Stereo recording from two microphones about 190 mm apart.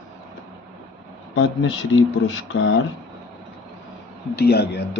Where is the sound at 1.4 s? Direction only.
75° left (ahead or behind).